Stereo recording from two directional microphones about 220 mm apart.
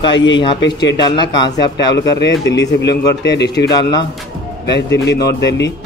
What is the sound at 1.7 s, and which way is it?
Speech, 50° left (ahead or behind).